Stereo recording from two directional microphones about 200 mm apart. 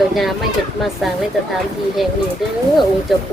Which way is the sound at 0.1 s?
Centre (ahead or behind).